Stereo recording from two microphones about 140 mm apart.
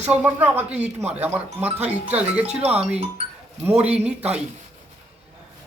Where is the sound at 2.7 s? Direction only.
10° right (ahead or behind).